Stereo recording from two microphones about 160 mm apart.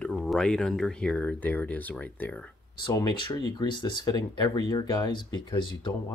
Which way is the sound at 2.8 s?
25° left (ahead or behind).